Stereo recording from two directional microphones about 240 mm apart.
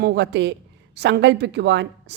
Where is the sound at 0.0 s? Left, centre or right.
Right.